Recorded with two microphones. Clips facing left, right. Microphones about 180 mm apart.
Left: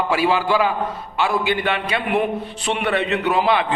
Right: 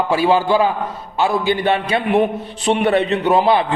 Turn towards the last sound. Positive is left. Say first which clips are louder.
# right 4 dB
turn(degrees=-35)  # may be behind; listen again after turning